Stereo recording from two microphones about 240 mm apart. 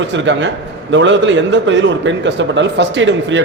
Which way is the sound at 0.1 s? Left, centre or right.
Right.